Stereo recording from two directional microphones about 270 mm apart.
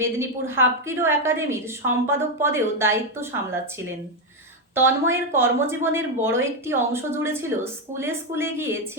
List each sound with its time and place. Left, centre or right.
0.0 s a woman's voice: centre
5.1 s a woman's voice: centre